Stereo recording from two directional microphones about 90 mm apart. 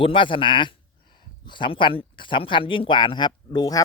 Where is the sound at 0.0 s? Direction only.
70° left (ahead or behind).